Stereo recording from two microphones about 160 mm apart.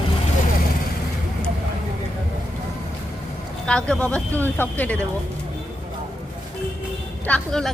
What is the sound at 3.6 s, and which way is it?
Speech, 5° left (ahead or behind).